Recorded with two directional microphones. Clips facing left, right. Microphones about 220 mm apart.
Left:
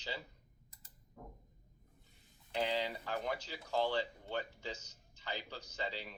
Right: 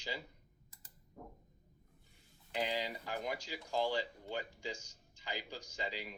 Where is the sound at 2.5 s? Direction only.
10° right (ahead or behind).